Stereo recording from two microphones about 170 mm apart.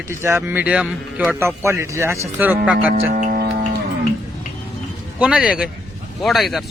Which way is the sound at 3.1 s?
60° right (ahead or behind).